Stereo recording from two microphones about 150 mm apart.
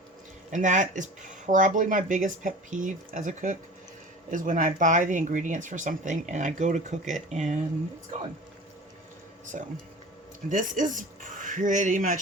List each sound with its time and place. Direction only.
0.5 s speech: 55° right (ahead or behind)
9.5 s speech: 60° right (ahead or behind)